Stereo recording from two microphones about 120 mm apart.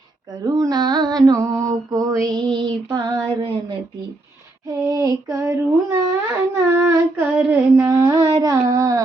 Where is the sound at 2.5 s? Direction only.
35° right (ahead or behind).